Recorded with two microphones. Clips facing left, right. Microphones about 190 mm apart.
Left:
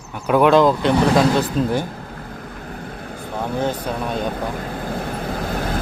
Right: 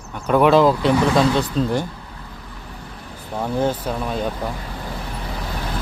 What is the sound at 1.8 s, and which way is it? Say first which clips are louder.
Vehicle: left 4 dB; 50° left (ahead or behind).